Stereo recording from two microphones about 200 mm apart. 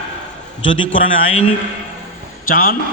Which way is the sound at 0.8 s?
80° left.